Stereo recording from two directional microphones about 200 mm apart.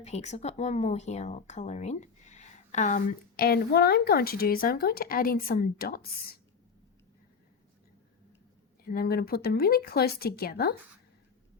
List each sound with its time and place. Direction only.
0.0 s speech: 35° left (ahead or behind)
8.8 s speech: 45° left (ahead or behind)